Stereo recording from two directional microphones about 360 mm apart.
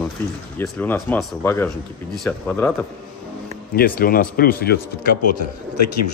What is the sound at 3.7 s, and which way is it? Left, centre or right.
Speech, left.